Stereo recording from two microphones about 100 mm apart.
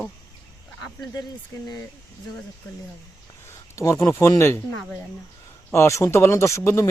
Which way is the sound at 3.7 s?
30° left (ahead or behind).